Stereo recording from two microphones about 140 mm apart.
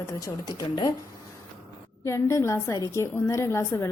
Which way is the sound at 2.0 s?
20° left (ahead or behind).